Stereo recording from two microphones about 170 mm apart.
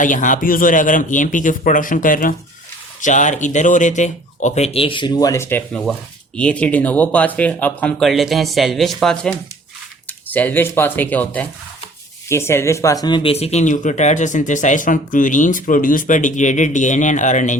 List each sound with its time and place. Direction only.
0.0 s speech: 50° left (ahead or behind)